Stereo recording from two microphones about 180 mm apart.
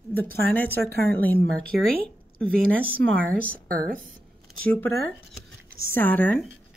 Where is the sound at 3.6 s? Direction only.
55° right (ahead or behind).